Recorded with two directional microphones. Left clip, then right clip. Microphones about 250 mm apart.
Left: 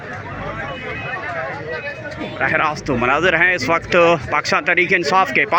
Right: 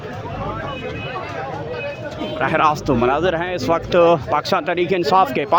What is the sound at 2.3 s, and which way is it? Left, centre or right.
Speech, centre.